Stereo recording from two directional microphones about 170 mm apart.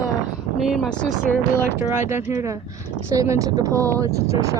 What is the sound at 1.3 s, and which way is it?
Speech, 10° left (ahead or behind).